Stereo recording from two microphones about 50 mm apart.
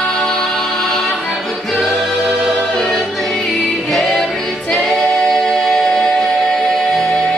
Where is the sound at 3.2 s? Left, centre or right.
Centre.